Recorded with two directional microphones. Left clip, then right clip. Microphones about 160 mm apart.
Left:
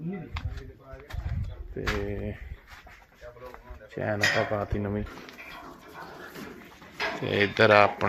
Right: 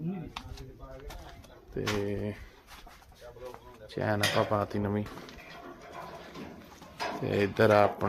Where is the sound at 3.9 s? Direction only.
Centre (ahead or behind).